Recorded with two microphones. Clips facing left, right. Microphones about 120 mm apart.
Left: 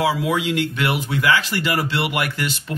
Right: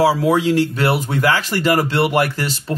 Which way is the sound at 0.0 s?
35° right (ahead or behind).